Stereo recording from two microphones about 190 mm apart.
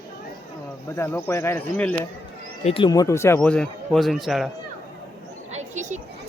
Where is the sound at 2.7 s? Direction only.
25° left (ahead or behind); by 4.4 s centre (ahead or behind).